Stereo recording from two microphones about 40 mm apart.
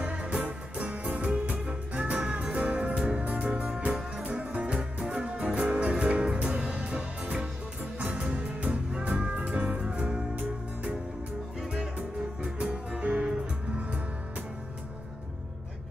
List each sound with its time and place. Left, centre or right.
0.0 s music: right
1.3 s music: right
12.4 s music: centre